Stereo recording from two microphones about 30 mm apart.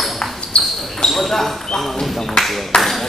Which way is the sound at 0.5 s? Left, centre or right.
Left.